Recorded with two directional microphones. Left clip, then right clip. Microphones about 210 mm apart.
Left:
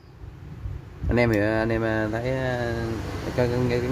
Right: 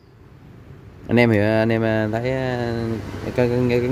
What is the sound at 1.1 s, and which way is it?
Speech, 35° right (ahead or behind).